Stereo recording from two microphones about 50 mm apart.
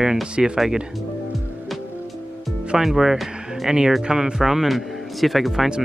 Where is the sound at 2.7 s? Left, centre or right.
Centre.